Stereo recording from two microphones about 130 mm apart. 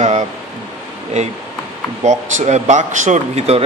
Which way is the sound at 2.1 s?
65° right (ahead or behind).